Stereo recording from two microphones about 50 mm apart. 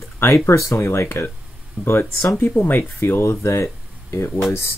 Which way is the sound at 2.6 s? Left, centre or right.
Left.